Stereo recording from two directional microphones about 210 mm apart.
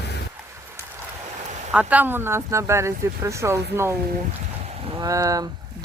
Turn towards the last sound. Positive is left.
turn(degrees=-15)  # may be behind; listen again after turning